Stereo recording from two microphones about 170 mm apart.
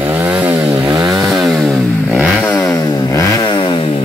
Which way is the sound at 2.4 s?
15° left (ahead or behind).